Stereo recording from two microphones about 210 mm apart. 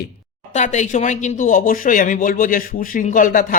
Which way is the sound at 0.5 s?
35° left (ahead or behind).